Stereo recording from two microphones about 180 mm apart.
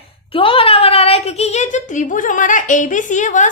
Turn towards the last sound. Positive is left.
turn(degrees=45)  # may be behind; listen again after turning